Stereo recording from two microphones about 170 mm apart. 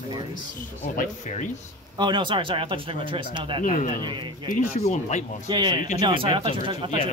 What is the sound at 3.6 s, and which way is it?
Speech, 50° left (ahead or behind).